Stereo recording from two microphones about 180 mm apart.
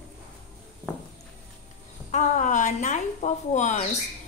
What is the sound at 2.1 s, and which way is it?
A woman's voice, 45° left (ahead or behind).